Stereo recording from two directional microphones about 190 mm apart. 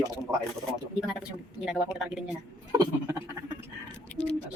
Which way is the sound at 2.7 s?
15° right (ahead or behind).